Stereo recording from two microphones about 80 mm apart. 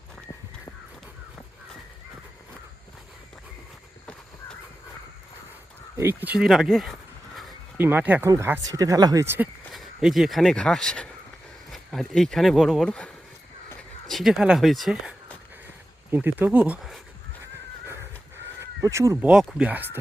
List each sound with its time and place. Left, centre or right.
6.0 s speech: right
6.2 s speech: centre
7.8 s speech: right
8.6 s speech: right
9.2 s speech: right
9.7 s speech: centre
14.1 s speech: centre
14.3 s speech: centre
16.1 s speech: right
17.4 s crow: right
18.8 s speech: right
19.2 s speech: centre
19.6 s speech: right